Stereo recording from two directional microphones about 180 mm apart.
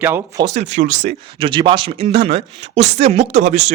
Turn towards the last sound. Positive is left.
turn(degrees=-40)  # may be behind; listen again after turning